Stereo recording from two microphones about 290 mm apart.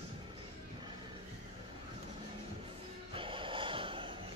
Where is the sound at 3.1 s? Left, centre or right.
Centre.